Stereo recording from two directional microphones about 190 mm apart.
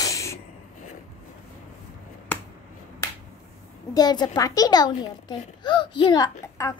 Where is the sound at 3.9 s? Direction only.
20° left (ahead or behind).